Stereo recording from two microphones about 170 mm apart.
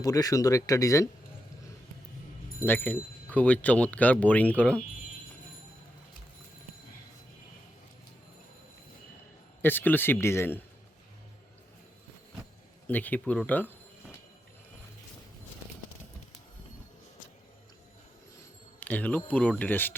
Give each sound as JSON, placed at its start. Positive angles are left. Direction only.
{"t": 0.0, "sound": "speech", "side_deg": 20}
{"t": 2.6, "sound": "speech", "side_deg": 10}
{"t": 9.6, "sound": "speech", "side_deg": 10}
{"t": 12.9, "sound": "speech", "side_deg": 10}
{"t": 18.8, "sound": "speech", "side_deg": 10}